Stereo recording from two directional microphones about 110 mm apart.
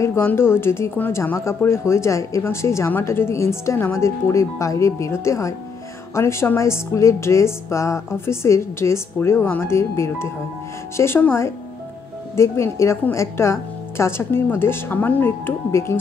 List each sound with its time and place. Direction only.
0.0 s speech: 25° left (ahead or behind)